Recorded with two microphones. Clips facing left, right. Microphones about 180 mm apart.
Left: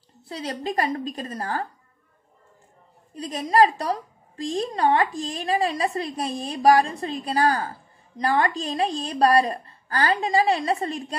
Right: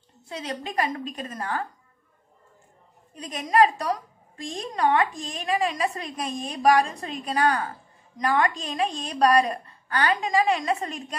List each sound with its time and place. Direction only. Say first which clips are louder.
0.3 s a woman's voice: left 3 dB; 35° left (ahead or behind)
3.2 s a woman's voice: left 1 dB; 30° left (ahead or behind)